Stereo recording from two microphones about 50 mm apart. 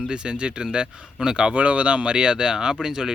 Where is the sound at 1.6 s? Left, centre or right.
Right.